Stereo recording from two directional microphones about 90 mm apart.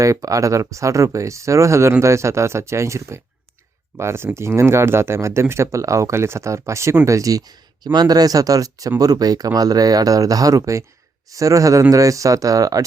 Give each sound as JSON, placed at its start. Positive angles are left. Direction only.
{"t": 0.0, "sound": "speech", "side_deg": -35}